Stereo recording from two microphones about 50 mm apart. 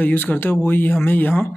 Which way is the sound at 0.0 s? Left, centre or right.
Left.